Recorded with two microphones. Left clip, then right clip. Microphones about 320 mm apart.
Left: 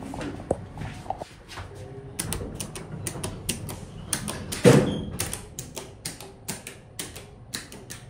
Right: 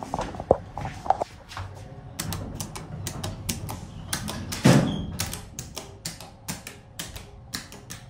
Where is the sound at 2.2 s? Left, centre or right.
Centre.